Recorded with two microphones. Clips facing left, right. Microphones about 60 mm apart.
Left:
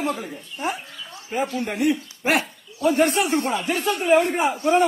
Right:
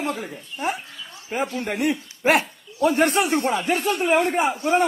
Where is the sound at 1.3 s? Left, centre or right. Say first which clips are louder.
Left 1 dB; right.